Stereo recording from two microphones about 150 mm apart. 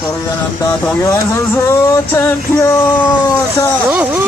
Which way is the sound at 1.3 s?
20° left (ahead or behind).